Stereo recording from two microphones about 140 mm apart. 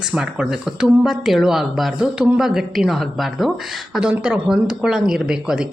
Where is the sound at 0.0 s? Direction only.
5° right (ahead or behind).